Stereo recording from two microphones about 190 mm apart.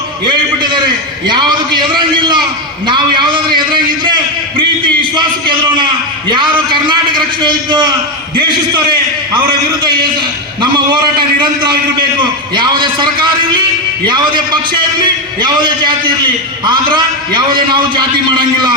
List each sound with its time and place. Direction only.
1.3 s a man's voice: 25° right (ahead or behind)
5.5 s a man's voice: 25° right (ahead or behind)
12.5 s a man's voice: 25° right (ahead or behind)